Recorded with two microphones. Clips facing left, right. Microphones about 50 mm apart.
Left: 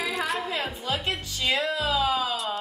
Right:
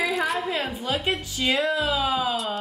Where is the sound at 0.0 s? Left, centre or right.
Centre.